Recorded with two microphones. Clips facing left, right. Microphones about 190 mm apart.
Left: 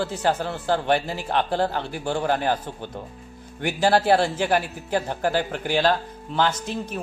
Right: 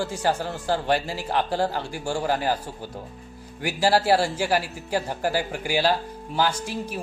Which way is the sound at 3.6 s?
10° right (ahead or behind).